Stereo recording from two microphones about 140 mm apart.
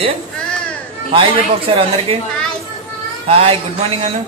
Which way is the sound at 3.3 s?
45° right (ahead or behind).